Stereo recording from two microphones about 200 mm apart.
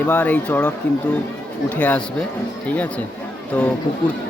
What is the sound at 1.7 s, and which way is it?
Speech, 5° left (ahead or behind).